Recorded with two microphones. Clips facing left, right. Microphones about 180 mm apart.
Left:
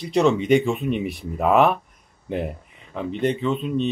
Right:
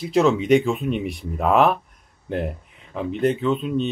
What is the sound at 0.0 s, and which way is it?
Speech, centre (ahead or behind).